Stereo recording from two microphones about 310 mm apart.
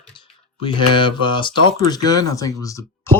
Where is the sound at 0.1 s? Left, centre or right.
Centre.